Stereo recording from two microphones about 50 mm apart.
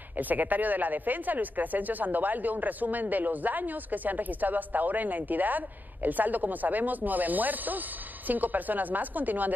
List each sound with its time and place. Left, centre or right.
0.2 s speech: right